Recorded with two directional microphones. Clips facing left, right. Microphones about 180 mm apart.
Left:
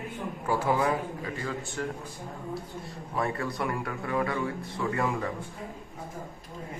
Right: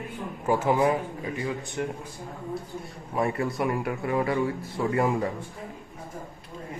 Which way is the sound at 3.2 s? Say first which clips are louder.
Right 4 dB; 20° right (ahead or behind).